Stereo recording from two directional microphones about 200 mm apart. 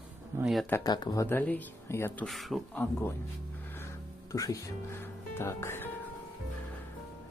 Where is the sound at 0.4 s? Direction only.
Centre (ahead or behind).